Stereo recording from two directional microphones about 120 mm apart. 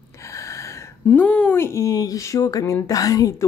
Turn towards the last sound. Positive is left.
turn(degrees=30)  # may be behind; listen again after turning